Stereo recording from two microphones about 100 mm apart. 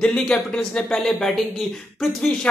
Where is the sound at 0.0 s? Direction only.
10° left (ahead or behind).